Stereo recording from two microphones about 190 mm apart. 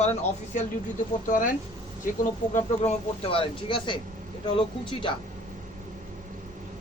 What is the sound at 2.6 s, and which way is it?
Speech, 30° left (ahead or behind).